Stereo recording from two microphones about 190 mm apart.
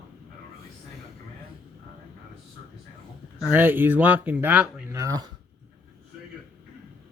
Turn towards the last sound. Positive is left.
turn(degrees=-20)  # may be behind; listen again after turning